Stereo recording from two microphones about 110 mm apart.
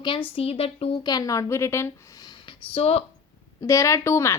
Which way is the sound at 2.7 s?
65° left (ahead or behind).